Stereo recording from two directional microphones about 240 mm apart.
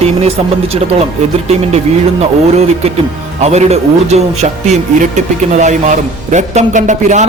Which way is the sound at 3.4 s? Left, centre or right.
Right.